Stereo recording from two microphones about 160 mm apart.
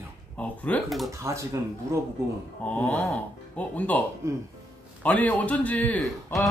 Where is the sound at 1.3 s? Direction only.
20° right (ahead or behind).